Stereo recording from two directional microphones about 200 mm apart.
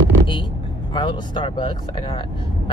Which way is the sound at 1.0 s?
25° left (ahead or behind).